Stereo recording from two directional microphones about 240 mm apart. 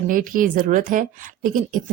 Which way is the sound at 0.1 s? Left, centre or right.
Right.